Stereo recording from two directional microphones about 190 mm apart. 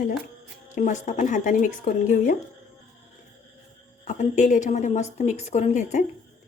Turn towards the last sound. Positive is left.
turn(degrees=40)  # may be behind; listen again after turning